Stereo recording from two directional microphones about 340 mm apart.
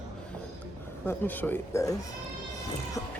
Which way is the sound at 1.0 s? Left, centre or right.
Centre.